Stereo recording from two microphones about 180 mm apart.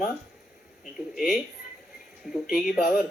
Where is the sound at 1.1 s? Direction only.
Centre (ahead or behind).